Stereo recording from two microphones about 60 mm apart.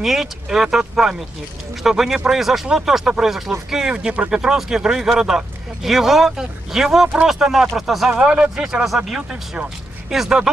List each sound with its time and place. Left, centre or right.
0.0 s speech: centre
3.9 s speech: right; by 8.1 s centre
8.1 s speech: right
8.8 s speech: centre